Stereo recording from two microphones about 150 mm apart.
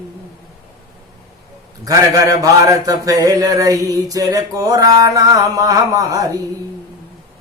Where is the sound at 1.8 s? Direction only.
20° right (ahead or behind).